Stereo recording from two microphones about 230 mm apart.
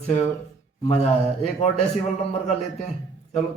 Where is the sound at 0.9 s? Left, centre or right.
Left.